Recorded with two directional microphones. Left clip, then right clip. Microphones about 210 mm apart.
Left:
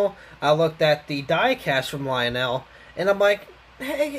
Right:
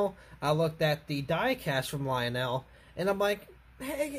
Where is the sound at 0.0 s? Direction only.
20° right (ahead or behind).